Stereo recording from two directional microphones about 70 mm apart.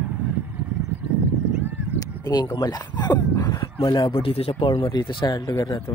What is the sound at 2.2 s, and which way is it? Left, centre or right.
Speech, left.